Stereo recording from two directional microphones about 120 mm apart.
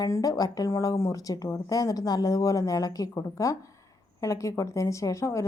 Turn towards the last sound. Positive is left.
turn(degrees=25)  # may be behind; listen again after turning